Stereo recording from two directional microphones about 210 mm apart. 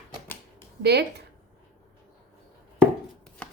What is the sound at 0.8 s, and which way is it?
Speech, 50° right (ahead or behind).